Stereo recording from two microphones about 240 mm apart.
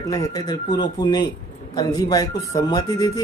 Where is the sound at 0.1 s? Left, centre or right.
Centre.